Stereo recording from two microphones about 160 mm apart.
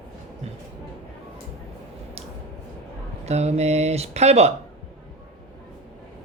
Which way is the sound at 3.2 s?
45° right (ahead or behind).